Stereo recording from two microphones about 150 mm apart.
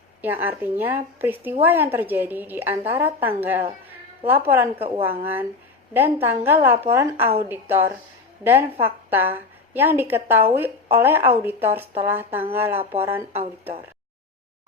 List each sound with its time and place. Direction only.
0.2 s a woman's voice: 15° right (ahead or behind)
4.8 s a woman's voice: 40° right (ahead or behind)
5.0 s a woman's voice: 15° right (ahead or behind)